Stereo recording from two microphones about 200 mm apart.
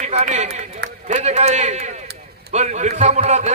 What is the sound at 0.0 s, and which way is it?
A man's voice, 35° right (ahead or behind).